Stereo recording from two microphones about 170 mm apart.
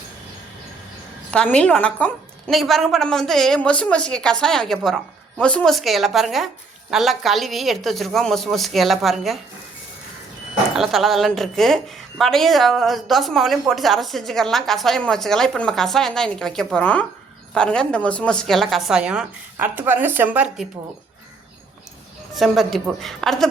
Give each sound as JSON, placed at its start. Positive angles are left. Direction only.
{"t": 1.3, "sound": "a woman's voice", "side_deg": 5}
{"t": 10.8, "sound": "a woman's voice", "side_deg": 0}
{"t": 22.4, "sound": "a woman's voice", "side_deg": 0}